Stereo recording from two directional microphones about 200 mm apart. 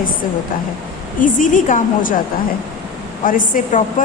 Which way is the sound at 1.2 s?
40° left (ahead or behind).